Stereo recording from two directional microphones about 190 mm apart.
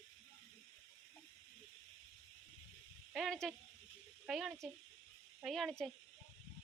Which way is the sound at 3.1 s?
Centre (ahead or behind).